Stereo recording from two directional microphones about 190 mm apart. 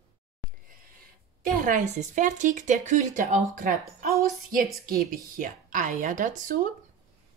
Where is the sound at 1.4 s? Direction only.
45° right (ahead or behind).